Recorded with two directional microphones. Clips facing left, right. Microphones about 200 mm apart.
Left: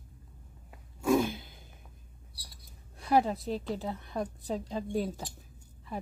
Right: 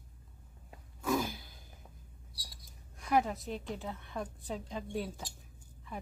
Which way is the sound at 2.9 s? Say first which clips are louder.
Left 4 dB; 35° left (ahead or behind).